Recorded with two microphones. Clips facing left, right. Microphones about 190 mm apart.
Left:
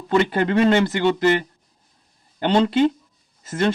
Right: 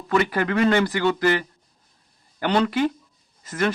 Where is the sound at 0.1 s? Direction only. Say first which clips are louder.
Left 3 dB; 25° left (ahead or behind).